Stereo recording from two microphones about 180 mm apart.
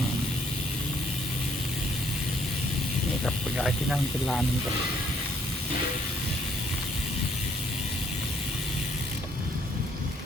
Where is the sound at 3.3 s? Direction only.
Centre (ahead or behind).